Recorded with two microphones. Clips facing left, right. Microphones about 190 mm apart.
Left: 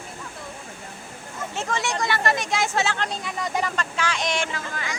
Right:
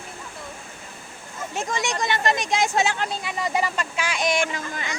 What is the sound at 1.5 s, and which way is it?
Speech, 15° right (ahead or behind).